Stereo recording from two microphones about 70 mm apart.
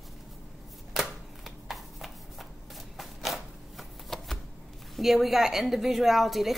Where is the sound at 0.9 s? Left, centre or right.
Centre.